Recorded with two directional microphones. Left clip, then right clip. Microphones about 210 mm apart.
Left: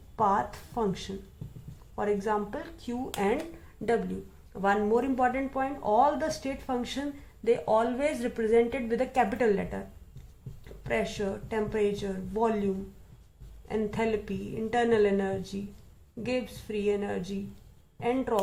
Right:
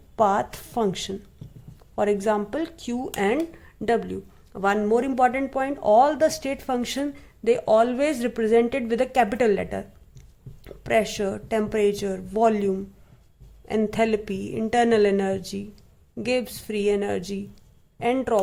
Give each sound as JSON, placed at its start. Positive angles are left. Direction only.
{"t": 0.2, "sound": "speech", "side_deg": -55}